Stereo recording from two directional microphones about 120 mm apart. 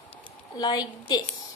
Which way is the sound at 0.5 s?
35° left (ahead or behind).